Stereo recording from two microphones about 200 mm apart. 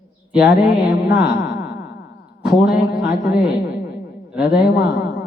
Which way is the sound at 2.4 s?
50° left (ahead or behind).